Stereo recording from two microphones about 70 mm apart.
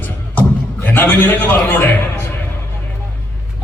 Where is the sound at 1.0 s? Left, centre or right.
Left.